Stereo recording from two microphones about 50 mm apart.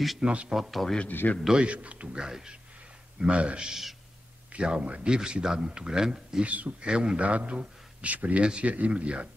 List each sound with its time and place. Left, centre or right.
0.2 s a man's voice: right
0.5 s a man's voice: centre
1.5 s a man's voice: right
2.2 s a man's voice: centre
6.4 s a man's voice: right